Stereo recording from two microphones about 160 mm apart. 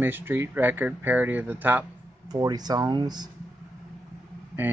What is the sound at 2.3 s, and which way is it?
Speech, 25° right (ahead or behind).